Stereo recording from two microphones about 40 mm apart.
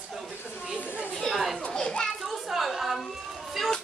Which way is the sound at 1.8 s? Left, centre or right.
Left.